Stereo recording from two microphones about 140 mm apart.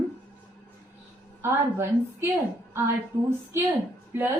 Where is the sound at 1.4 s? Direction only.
15° right (ahead or behind).